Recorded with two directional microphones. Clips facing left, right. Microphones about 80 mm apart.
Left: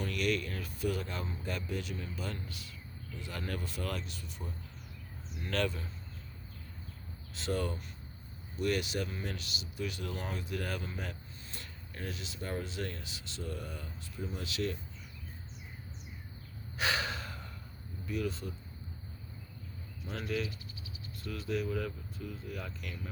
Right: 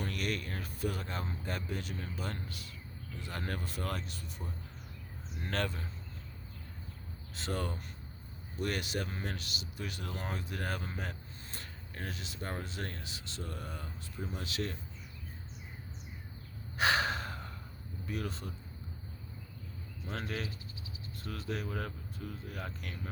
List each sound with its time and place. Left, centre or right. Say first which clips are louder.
0.0 s speech: left 4 dB; right
5.4 s speech: left 2 dB; right
7.3 s speech: left 3 dB; right
16.7 s gasp: right 4 dB; right
18.0 s speech: left 3 dB; right
20.1 s speech: left 3 dB; right